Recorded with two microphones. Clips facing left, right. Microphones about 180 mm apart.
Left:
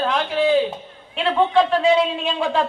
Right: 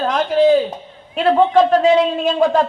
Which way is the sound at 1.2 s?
40° right (ahead or behind).